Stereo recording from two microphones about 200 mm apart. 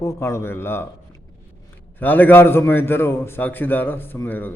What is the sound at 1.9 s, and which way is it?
A man's voice, 10° left (ahead or behind).